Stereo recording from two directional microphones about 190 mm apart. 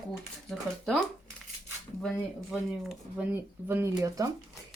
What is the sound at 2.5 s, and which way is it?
Speech, 5° right (ahead or behind).